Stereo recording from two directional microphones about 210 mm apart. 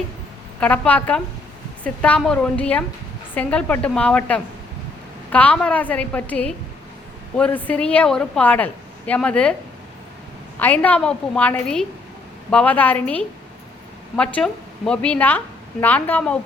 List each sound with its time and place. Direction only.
0.6 s a woman's voice: 5° left (ahead or behind)
10.6 s a woman's voice: 10° left (ahead or behind)